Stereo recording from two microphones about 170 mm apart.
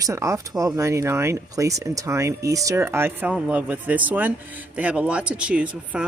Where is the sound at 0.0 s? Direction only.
20° right (ahead or behind).